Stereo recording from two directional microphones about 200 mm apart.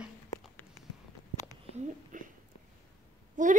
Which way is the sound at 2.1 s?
40° right (ahead or behind).